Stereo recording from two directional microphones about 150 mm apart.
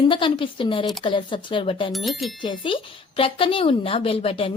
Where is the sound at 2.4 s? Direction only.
35° left (ahead or behind).